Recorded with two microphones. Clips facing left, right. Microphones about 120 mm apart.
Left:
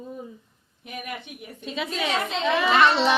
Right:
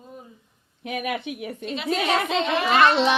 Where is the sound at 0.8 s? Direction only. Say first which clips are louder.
Right 8 dB; 90° right.